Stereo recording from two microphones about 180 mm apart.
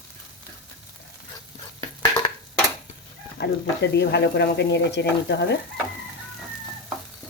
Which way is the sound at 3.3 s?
70° left (ahead or behind).